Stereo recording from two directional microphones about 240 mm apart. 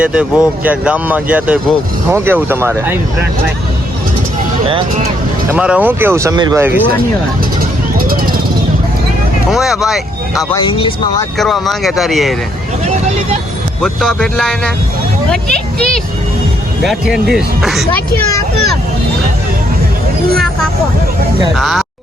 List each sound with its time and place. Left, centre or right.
0.0 s speech: centre
5.5 s speech: centre
7.9 s vehicle: right
9.5 s speech: centre
10.5 s speech: centre
11.3 s speech: centre
13.8 s speech: centre
21.5 s speech: centre